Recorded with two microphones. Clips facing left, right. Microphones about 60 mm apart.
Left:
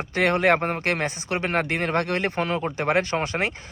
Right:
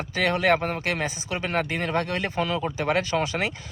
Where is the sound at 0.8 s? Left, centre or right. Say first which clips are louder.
Left 2 dB; left.